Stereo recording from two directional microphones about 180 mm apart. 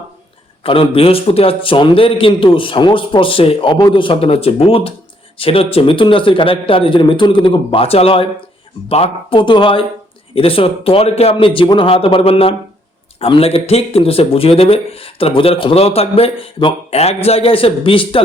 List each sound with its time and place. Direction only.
0.6 s a man's voice: 30° left (ahead or behind)